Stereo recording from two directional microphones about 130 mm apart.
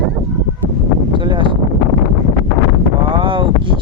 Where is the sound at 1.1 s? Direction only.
40° right (ahead or behind).